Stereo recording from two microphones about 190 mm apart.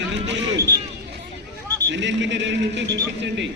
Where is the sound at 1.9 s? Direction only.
70° right (ahead or behind).